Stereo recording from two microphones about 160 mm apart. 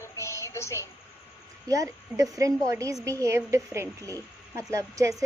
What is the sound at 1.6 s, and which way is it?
Speech, 20° right (ahead or behind).